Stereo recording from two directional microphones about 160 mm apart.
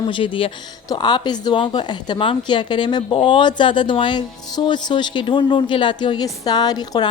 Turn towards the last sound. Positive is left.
turn(degrees=25)  # may be behind; listen again after turning